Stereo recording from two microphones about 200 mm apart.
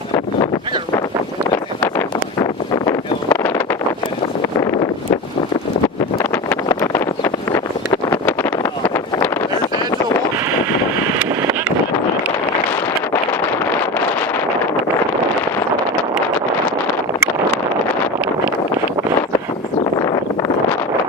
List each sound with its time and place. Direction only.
1.8 s wind noise: 15° left (ahead or behind)
6.3 s vehicle: 10° left (ahead or behind)